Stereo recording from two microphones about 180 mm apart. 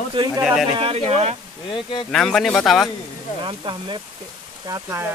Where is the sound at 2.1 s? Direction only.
5° left (ahead or behind).